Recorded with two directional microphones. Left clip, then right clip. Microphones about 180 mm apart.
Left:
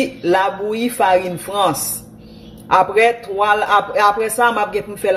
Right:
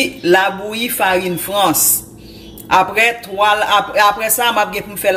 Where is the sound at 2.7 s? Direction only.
40° left (ahead or behind).